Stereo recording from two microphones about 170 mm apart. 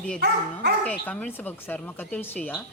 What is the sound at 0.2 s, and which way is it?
Speech, 70° right (ahead or behind).